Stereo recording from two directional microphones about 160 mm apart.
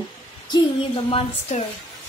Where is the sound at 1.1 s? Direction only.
35° left (ahead or behind).